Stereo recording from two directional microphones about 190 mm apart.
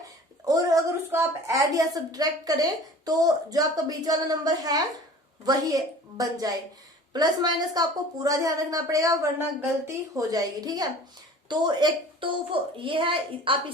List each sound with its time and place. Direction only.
0.4 s a woman's voice: 20° right (ahead or behind)